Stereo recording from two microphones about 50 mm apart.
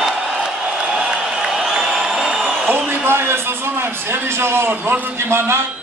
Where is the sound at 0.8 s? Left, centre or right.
Centre.